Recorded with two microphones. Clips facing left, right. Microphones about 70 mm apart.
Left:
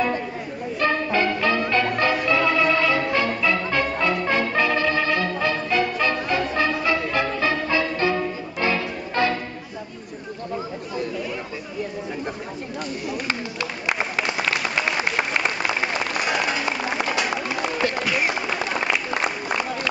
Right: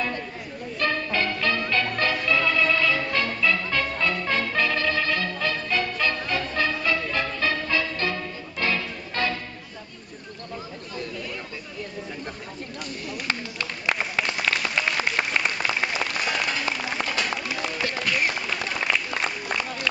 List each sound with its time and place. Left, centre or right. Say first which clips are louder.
0.7 s music: left 4 dB; centre
13.3 s applause: left 3 dB; centre
17.5 s music: left 5 dB; centre
18.5 s a sound: left 3 dB; centre